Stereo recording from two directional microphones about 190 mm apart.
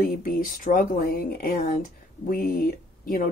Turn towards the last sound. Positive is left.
turn(degrees=50)  # may be behind; listen again after turning